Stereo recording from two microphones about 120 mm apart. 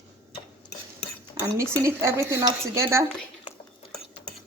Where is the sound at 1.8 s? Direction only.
20° right (ahead or behind).